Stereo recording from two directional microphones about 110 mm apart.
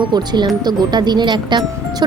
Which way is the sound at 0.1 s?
40° right (ahead or behind).